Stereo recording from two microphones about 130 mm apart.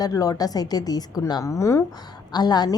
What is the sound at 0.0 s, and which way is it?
A woman's voice, 30° left (ahead or behind).